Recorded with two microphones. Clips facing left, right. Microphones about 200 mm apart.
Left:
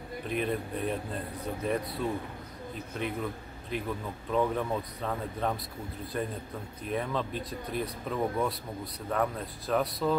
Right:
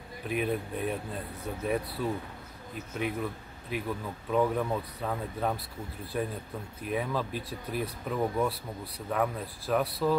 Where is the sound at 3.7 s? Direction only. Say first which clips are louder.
Even; 5° right (ahead or behind).